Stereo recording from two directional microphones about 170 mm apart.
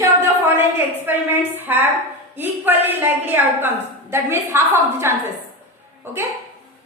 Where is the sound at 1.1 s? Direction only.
10° right (ahead or behind).